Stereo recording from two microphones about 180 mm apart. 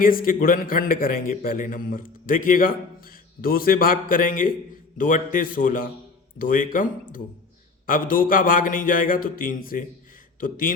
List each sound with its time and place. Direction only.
0.0 s a man's voice: 55° left (ahead or behind)